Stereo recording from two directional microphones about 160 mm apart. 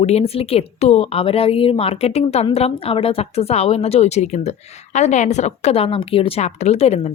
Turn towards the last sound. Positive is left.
turn(degrees=40)  # may be behind; listen again after turning